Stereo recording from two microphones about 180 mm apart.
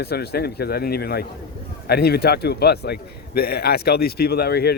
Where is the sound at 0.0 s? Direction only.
60° left (ahead or behind).